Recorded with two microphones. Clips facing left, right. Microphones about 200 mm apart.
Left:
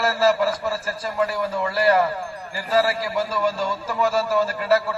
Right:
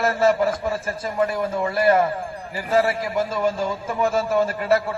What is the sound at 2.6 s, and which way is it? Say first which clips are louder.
Speech: right 1 dB; 50° right (ahead or behind).